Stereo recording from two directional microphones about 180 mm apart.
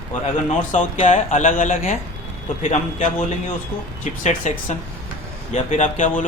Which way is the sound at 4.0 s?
40° left (ahead or behind).